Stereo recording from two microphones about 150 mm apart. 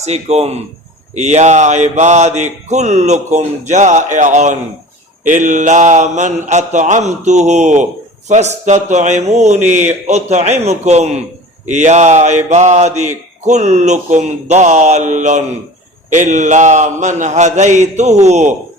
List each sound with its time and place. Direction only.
0.0 s mantra: 45° right (ahead or behind)